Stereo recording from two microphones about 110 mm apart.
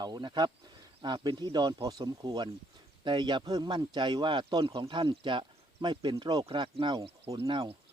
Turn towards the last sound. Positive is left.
turn(degrees=-50)  # may be behind; listen again after turning